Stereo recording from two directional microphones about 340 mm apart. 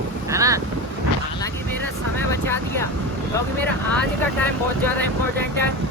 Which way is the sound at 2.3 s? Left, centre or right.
Centre.